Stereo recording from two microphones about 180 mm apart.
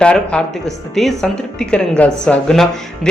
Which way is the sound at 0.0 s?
5° left (ahead or behind).